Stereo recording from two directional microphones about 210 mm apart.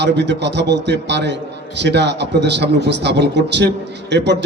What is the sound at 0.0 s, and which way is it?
A man's voice, 55° right (ahead or behind).